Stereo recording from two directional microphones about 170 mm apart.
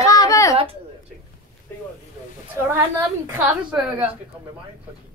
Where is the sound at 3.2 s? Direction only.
10° right (ahead or behind).